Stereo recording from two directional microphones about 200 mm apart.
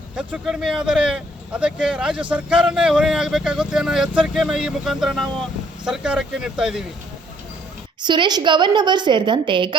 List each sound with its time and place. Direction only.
0.2 s speech: 5° right (ahead or behind)
8.0 s a woman's voice: 20° right (ahead or behind)